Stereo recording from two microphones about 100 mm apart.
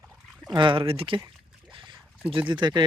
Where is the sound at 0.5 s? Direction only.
50° right (ahead or behind).